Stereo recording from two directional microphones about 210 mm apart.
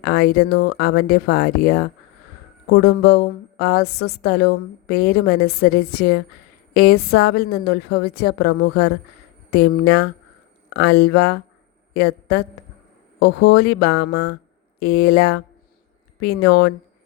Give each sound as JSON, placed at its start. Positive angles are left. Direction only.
{"t": 0.0, "sound": "a woman's voice", "side_deg": 50}